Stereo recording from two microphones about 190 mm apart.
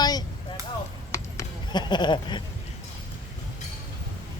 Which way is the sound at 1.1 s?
20° left (ahead or behind).